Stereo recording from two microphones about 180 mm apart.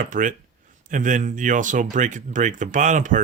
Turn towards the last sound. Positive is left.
turn(degrees=-45)  # may be behind; listen again after turning